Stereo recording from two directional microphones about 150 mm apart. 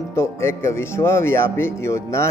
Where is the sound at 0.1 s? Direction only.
20° left (ahead or behind).